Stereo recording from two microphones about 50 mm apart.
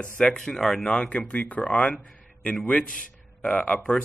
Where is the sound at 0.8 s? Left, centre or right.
Left.